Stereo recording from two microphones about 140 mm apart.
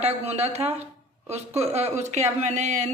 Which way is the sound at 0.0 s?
50° right (ahead or behind).